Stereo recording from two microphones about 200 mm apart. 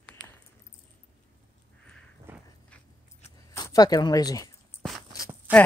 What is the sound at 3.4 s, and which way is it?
Speech, 20° left (ahead or behind).